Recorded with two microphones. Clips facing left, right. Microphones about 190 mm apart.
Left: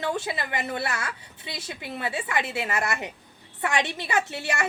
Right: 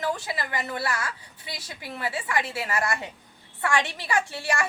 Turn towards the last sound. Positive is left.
turn(degrees=20)  # may be behind; listen again after turning